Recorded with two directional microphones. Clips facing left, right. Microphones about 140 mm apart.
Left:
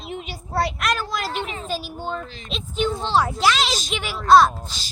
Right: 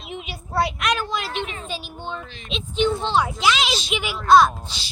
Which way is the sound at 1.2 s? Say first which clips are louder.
Left 1 dB; 40° left (ahead or behind).